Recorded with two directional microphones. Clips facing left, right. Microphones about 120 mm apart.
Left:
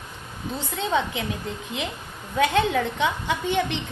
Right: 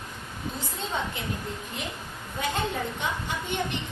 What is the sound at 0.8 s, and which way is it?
Speech, 85° left.